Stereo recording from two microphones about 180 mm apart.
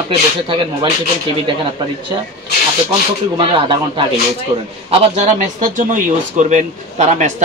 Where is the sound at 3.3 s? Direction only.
25° right (ahead or behind).